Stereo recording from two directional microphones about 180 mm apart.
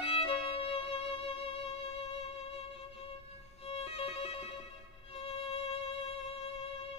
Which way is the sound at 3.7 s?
35° left (ahead or behind).